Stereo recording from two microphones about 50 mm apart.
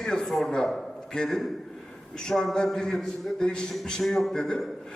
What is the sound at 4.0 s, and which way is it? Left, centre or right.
Speech, centre.